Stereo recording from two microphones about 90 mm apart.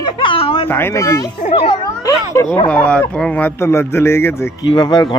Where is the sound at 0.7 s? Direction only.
25° left (ahead or behind).